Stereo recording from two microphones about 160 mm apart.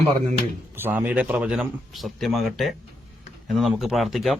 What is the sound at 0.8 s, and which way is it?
Speech, 10° right (ahead or behind).